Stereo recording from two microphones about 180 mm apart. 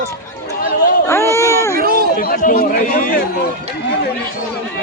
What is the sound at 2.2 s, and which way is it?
Speech, 50° left (ahead or behind).